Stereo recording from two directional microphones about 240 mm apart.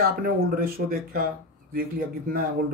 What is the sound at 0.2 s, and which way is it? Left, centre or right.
Speech, right.